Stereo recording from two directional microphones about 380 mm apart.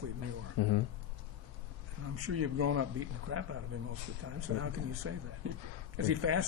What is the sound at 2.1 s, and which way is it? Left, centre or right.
Speech, right.